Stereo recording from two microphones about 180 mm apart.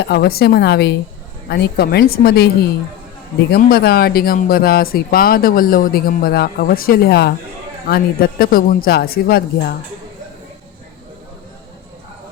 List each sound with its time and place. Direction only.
0.0 s speech: 65° left (ahead or behind)